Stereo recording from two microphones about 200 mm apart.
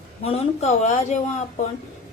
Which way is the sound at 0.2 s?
30° left (ahead or behind).